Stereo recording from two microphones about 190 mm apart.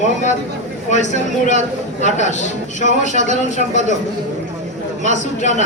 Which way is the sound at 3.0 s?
40° right (ahead or behind).